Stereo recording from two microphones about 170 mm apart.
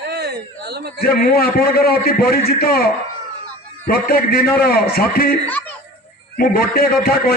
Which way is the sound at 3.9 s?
60° left (ahead or behind).